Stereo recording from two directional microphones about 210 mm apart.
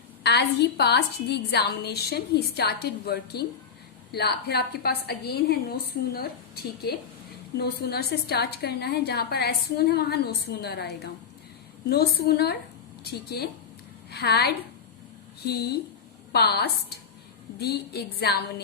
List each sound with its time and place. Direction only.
0.2 s a woman's voice: 50° left (ahead or behind)